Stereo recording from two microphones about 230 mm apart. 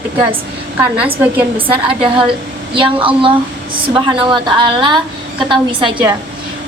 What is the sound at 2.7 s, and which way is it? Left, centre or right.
A woman's voice, right.